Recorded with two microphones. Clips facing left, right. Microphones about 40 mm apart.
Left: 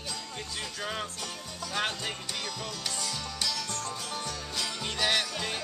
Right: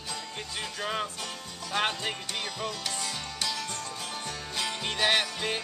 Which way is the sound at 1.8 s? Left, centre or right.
Centre.